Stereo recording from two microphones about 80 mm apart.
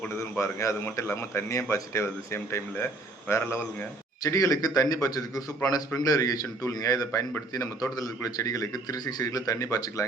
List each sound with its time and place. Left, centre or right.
0.1 s a man's voice: left